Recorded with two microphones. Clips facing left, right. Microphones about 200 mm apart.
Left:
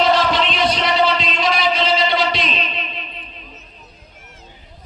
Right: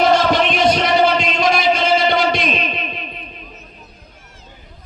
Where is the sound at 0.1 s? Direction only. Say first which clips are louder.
Right 3 dB; 50° right (ahead or behind).